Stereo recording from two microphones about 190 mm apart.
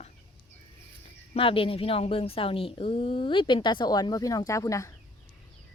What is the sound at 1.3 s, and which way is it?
Speech, 30° left (ahead or behind).